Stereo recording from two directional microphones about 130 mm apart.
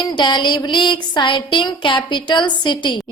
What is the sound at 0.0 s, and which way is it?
A woman's voice, 35° left (ahead or behind).